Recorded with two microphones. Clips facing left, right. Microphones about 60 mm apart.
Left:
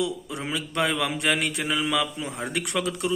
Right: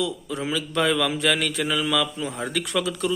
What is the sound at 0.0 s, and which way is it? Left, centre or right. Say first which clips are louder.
Mantra: right 2 dB; centre.